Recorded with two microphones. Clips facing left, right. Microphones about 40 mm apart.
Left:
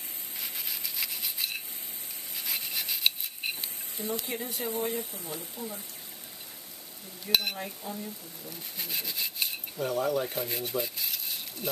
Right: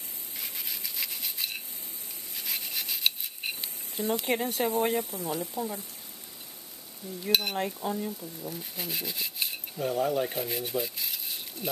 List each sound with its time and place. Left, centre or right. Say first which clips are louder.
0.4 s rub: even; centre
3.9 s speech: right 6 dB; right
7.5 s speech: right 7 dB; right
8.7 s rub: left 1 dB; centre
10.0 s speech: right 1 dB; centre